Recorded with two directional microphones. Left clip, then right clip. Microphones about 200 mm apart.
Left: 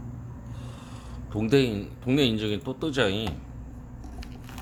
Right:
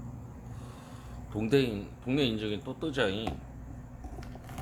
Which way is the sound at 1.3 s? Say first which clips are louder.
Left 4 dB; 15° left (ahead or behind).